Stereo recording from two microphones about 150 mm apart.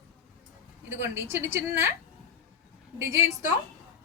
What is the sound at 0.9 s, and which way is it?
A woman's voice, 15° right (ahead or behind).